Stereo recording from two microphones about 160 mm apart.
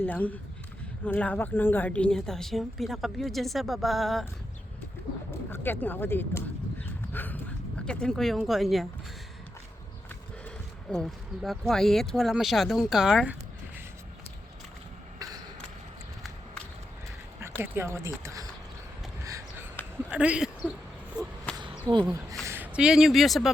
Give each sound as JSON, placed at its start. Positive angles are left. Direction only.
{"t": 0.0, "sound": "a woman's voice", "side_deg": 10}
{"t": 5.5, "sound": "a sound", "side_deg": 15}
{"t": 7.9, "sound": "a woman's voice", "side_deg": 5}
{"t": 10.4, "sound": "a woman's voice", "side_deg": 5}
{"t": 17.4, "sound": "speech", "side_deg": -15}
{"t": 19.2, "sound": "a sound", "side_deg": -20}
{"t": 20.1, "sound": "speech", "side_deg": -5}
{"t": 21.5, "sound": "a sound", "side_deg": -25}
{"t": 22.0, "sound": "speech", "side_deg": -20}